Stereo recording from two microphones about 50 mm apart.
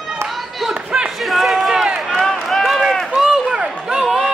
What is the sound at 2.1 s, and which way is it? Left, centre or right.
Run, centre.